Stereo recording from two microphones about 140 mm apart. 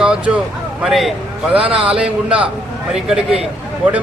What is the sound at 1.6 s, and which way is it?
Speech, 40° right (ahead or behind).